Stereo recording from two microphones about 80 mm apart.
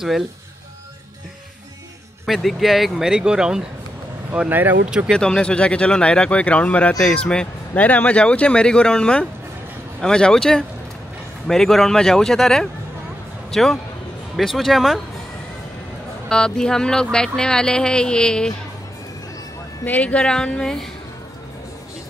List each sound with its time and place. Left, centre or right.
2.2 s speech: centre
4.5 s speech: right
5.1 s a man's voice: centre
16.3 s speech: centre
19.8 s speech: centre